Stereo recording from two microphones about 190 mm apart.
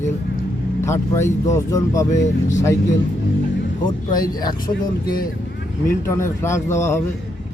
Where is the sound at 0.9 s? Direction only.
15° left (ahead or behind).